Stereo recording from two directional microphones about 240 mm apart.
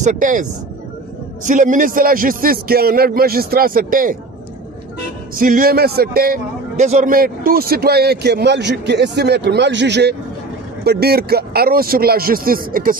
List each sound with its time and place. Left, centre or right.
0.0 s a man's voice: right
5.4 s a man's voice: right